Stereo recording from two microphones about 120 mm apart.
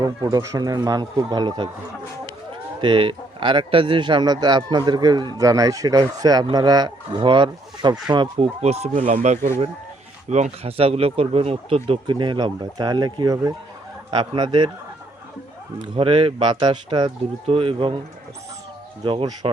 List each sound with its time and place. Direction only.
0.0 s speech: 35° right (ahead or behind)
2.8 s speech: 45° right (ahead or behind)
8.4 s speech: 60° right (ahead or behind); by 14.7 s 40° right (ahead or behind)
16.0 s speech: 50° right (ahead or behind)
17.4 s speech: 50° right (ahead or behind)
19.0 s speech: 45° right (ahead or behind)